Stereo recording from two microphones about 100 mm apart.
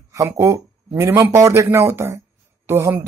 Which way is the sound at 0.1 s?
30° right (ahead or behind).